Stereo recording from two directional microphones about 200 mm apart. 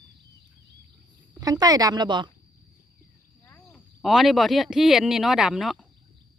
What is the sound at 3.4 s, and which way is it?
Speech, 5° left (ahead or behind).